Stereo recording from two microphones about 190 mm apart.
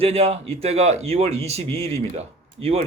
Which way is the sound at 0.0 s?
30° right (ahead or behind).